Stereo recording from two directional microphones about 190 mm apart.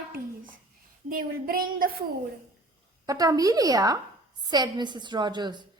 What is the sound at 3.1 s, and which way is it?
A woman's voice, 20° right (ahead or behind).